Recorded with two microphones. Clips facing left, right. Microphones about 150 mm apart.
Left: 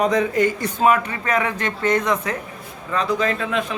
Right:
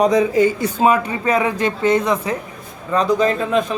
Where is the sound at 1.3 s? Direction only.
15° right (ahead or behind).